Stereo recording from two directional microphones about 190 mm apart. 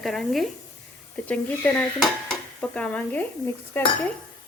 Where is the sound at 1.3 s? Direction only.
5° left (ahead or behind).